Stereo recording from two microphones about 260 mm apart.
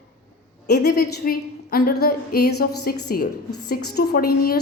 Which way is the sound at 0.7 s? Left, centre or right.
Left.